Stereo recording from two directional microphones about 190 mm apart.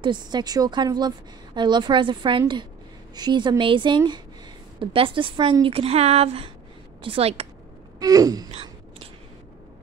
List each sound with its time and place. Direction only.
0.0 s a woman's voice: 25° right (ahead or behind)
8.0 s a woman's voice: 20° right (ahead or behind)